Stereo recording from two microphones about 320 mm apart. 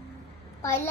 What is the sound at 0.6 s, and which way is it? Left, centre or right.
Speech, centre.